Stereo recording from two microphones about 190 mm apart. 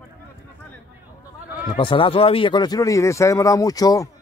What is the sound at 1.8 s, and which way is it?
A man's voice, 25° left (ahead or behind).